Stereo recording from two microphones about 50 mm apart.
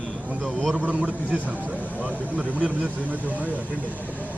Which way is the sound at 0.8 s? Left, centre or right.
Right.